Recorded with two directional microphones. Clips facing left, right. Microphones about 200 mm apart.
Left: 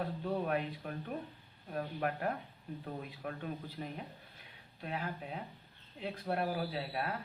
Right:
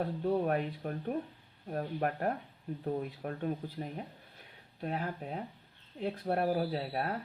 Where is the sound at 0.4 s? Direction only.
45° right (ahead or behind).